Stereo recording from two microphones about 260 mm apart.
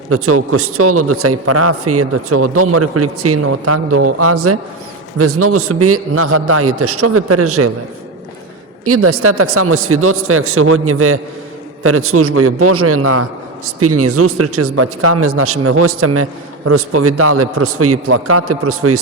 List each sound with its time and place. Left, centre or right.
0.1 s a man's voice: right
8.8 s a man's voice: right